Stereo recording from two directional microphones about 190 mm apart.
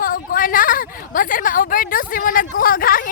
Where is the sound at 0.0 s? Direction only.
50° left (ahead or behind).